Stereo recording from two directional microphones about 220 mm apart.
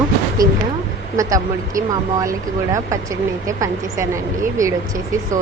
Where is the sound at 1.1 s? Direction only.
15° right (ahead or behind).